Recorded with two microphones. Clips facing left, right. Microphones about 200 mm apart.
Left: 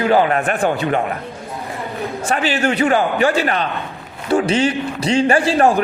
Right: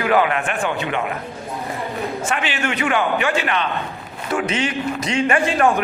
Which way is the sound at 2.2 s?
35° left (ahead or behind).